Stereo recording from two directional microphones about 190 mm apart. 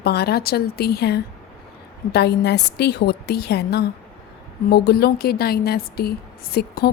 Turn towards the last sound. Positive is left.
turn(degrees=55)  # may be behind; listen again after turning